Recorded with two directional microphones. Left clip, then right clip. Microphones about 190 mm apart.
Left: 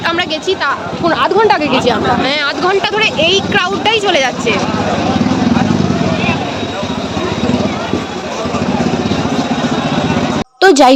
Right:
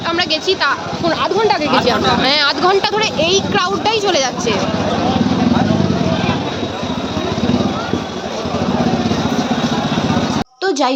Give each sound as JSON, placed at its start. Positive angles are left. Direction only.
{"t": 0.2, "sound": "speech", "side_deg": -5}
{"t": 1.0, "sound": "speech", "side_deg": 10}
{"t": 1.8, "sound": "speech", "side_deg": -5}
{"t": 10.6, "sound": "a woman's voice", "side_deg": 40}